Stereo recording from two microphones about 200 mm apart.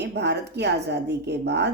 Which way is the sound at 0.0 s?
55° right (ahead or behind).